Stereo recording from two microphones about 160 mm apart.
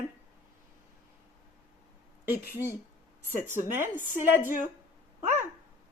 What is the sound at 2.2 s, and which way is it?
Speech, 15° right (ahead or behind).